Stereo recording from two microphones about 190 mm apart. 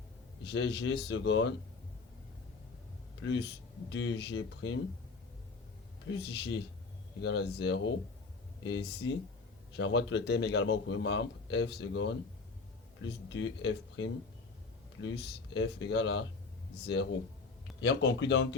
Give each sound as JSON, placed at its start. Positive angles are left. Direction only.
{"t": 0.5, "sound": "a man's voice", "side_deg": 70}
{"t": 3.2, "sound": "a man's voice", "side_deg": 70}
{"t": 6.1, "sound": "a man's voice", "side_deg": 65}
{"t": 9.7, "sound": "a man's voice", "side_deg": 70}